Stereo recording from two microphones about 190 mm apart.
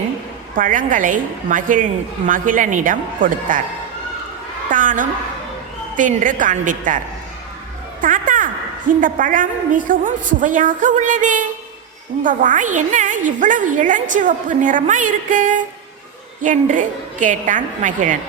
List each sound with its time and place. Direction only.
0.5 s a woman's voice: 45° right (ahead or behind)
4.7 s a woman's voice: 45° right (ahead or behind)
8.0 s a sound: 45° right (ahead or behind)
8.9 s a woman's voice: 45° right (ahead or behind)